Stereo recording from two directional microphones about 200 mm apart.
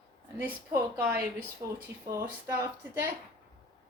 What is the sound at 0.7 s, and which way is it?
A woman's voice, 10° right (ahead or behind).